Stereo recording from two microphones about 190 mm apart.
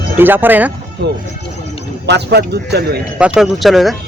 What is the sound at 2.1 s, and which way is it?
Speech, 60° right (ahead or behind).